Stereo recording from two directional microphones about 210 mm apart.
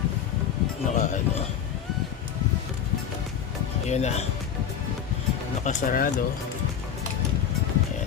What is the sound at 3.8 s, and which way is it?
Speech, 30° left (ahead or behind).